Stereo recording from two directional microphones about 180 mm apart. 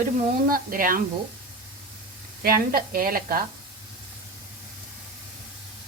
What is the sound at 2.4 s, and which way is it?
A woman's voice, 55° right (ahead or behind).